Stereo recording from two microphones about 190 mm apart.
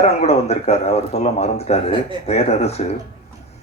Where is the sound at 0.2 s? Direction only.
35° left (ahead or behind).